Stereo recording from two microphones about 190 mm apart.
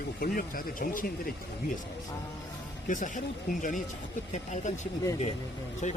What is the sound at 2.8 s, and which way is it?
Speech, 40° left (ahead or behind).